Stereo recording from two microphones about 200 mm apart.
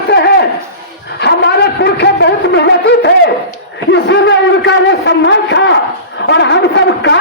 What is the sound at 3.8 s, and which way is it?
A man's voice, 60° left (ahead or behind).